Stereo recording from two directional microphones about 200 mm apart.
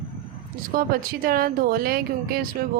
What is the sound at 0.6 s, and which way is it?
A woman's voice, 45° right (ahead or behind).